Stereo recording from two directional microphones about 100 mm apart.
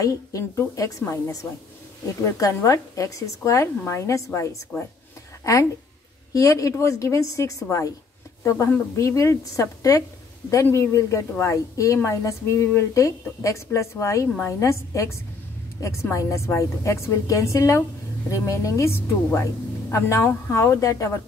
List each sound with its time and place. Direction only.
0.0 s a woman's voice: 30° left (ahead or behind)
8.9 s a woman's voice: 30° left (ahead or behind)